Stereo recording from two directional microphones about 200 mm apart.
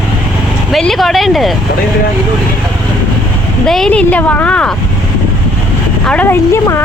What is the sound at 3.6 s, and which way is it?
A woman's voice, centre (ahead or behind).